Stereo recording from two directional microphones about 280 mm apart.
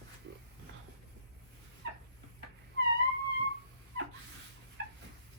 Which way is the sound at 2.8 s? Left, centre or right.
Right.